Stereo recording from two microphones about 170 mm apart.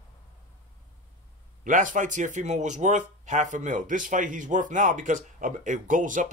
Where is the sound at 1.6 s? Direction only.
50° right (ahead or behind).